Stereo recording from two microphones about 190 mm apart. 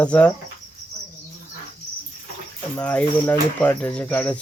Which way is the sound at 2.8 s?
5° left (ahead or behind).